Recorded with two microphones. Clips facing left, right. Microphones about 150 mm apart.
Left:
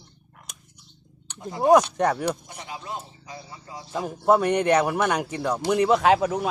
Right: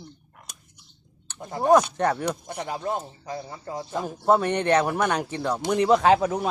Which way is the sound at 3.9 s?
5° left (ahead or behind).